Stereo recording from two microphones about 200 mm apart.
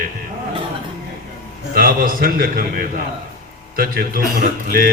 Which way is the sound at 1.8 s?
45° right (ahead or behind).